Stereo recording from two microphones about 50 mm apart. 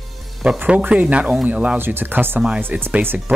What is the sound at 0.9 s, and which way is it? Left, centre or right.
Speech, right.